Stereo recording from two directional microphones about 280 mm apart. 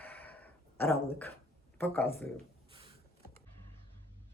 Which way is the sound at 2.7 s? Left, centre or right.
Centre.